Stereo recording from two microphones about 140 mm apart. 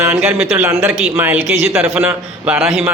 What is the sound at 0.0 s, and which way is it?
A man's voice, 15° right (ahead or behind).